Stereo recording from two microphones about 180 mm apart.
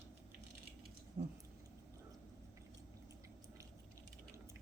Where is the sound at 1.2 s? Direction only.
40° right (ahead or behind).